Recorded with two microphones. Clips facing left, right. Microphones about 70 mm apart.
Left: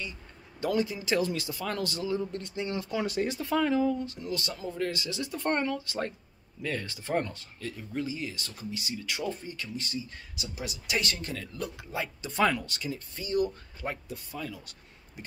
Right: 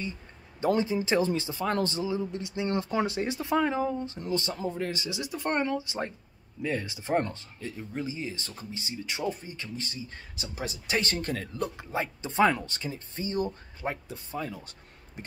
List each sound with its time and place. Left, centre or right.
0.6 s speech: right
2.6 s speech: right
3.2 s speech: right
7.2 s speech: right
15.2 s a sound: right